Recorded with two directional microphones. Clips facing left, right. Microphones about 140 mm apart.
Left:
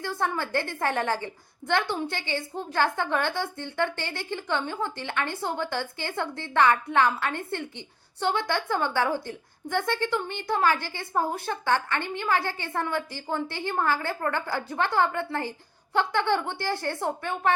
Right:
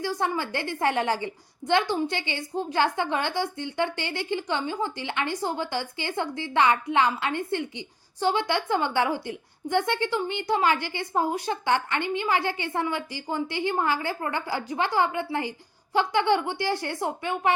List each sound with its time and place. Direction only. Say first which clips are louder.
0.0 s a woman's voice: right 2 dB; 15° right (ahead or behind)